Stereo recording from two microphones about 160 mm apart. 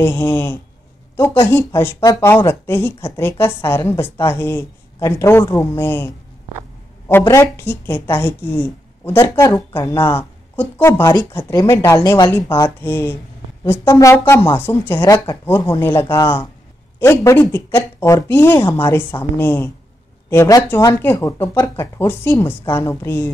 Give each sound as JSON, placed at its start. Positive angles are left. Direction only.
{"t": 0.0, "sound": "speech", "side_deg": 15}